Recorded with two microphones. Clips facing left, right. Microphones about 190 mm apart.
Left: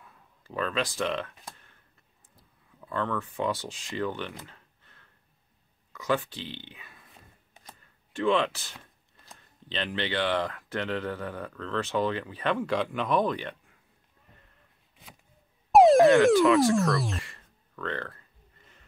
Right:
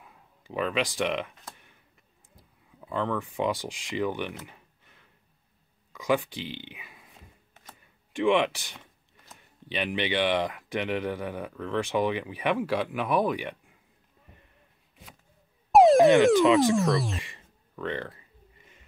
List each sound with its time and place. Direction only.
0.0 s speech: 15° right (ahead or behind)
2.3 s speech: 15° right (ahead or behind)
4.5 s a sound: 15° right (ahead or behind)
5.9 s speech: 15° right (ahead or behind)
7.8 s a sound: 15° right (ahead or behind)
9.4 s speech: 15° right (ahead or behind)
15.7 s music: centre (ahead or behind)
16.3 s speech: 20° right (ahead or behind)
16.7 s music: centre (ahead or behind)
17.2 s a sound: 15° right (ahead or behind)